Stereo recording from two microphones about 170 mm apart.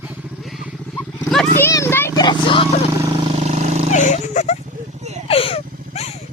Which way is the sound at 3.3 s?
40° right (ahead or behind).